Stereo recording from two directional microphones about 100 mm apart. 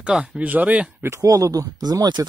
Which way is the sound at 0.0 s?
10° right (ahead or behind).